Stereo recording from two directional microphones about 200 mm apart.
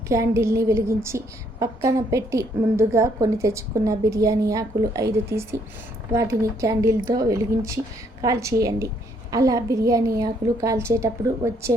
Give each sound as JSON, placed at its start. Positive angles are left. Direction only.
{"t": 0.1, "sound": "a woman's voice", "side_deg": -15}